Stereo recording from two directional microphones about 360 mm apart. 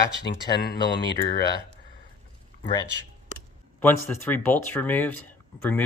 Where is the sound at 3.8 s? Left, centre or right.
Centre.